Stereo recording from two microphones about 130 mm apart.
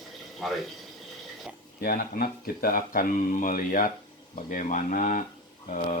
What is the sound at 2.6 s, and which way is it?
Speech, 90° left.